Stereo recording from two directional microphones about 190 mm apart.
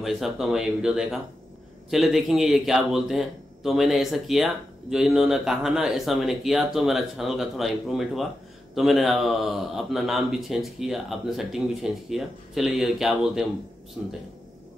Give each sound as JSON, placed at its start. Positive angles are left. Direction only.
{"t": 0.0, "sound": "a man's voice", "side_deg": 0}